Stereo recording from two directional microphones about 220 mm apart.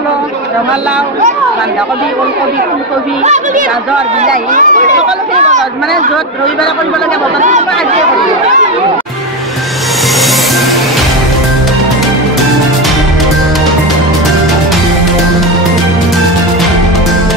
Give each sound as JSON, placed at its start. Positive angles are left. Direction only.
{"t": 4.2, "sound": "speech", "side_deg": -35}